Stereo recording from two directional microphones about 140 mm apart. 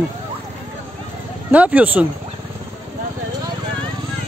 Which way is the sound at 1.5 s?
10° right (ahead or behind).